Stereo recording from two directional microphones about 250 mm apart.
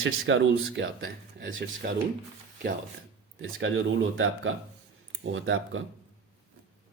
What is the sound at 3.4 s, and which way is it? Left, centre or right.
Speech, right.